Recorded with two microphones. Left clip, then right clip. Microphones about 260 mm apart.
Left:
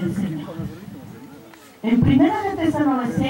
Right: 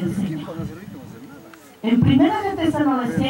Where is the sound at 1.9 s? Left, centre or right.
Centre.